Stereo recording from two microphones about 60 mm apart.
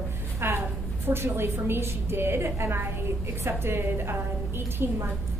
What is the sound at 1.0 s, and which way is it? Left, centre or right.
A woman's voice, right.